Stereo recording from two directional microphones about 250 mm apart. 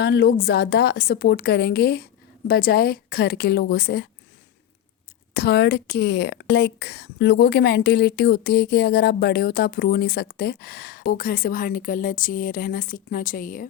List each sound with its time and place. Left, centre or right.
0.0 s speech: left
5.3 s speech: left